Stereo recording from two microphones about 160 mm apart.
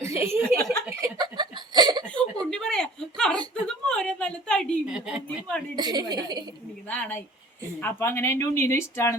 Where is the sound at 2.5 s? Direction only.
5° left (ahead or behind).